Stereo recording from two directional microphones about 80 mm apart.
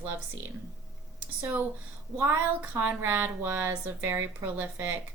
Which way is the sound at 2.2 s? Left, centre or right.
Centre.